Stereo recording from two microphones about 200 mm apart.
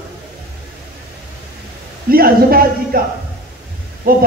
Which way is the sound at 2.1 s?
45° right (ahead or behind).